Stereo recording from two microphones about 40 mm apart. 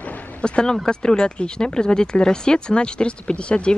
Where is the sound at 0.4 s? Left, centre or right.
Left.